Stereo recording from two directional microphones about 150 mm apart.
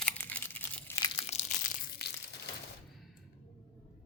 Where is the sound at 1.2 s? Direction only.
45° left (ahead or behind).